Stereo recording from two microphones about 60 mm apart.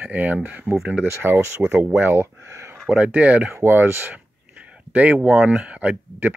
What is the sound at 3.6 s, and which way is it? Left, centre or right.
Speech, right.